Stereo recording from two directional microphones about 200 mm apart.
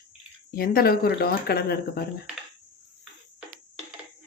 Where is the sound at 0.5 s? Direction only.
50° left (ahead or behind).